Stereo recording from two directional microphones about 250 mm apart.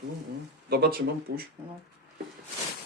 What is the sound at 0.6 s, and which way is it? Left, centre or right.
Speech, right.